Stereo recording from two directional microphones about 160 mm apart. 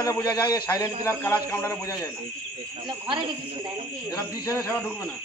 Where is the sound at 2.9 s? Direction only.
30° right (ahead or behind).